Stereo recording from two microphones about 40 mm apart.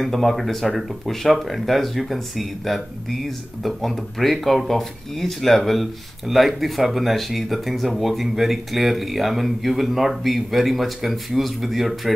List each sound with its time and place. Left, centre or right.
0.0 s speech: centre